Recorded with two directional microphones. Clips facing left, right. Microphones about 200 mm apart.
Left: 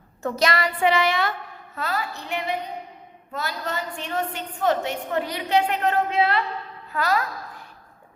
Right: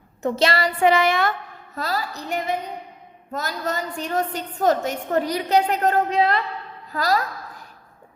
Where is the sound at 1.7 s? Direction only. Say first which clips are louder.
Right 1 dB; 35° right (ahead or behind).